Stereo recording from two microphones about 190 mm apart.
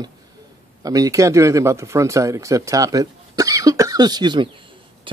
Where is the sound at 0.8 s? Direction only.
20° right (ahead or behind).